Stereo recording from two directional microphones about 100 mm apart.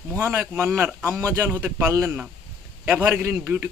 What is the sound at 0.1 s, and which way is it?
A man's voice, 30° right (ahead or behind).